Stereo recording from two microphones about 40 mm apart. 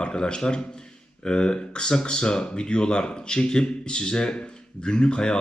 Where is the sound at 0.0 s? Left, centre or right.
Left.